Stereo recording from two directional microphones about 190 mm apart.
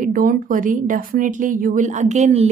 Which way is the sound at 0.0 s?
45° right (ahead or behind).